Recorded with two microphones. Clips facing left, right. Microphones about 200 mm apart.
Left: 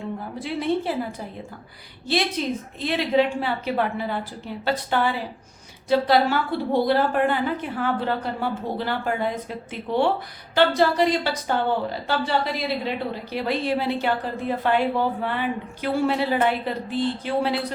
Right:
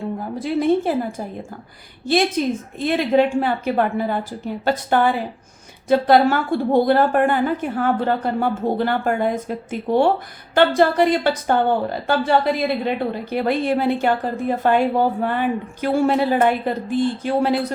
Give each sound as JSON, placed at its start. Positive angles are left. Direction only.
{"t": 0.3, "sound": "a woman's voice", "side_deg": -45}